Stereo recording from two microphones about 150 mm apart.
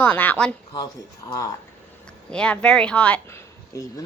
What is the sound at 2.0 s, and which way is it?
Speech, 5° left (ahead or behind).